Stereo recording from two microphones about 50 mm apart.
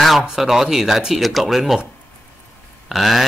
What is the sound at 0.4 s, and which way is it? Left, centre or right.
Speech, centre.